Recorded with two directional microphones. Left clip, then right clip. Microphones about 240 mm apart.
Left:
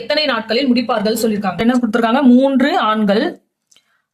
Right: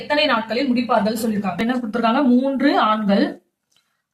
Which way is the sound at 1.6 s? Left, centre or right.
Left.